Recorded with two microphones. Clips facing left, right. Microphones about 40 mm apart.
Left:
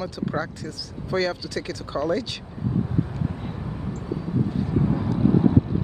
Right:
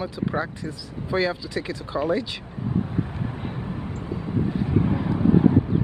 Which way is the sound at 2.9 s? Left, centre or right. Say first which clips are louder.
Left 1 dB; right.